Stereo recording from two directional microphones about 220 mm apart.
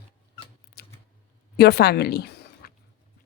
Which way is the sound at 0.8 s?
45° left (ahead or behind).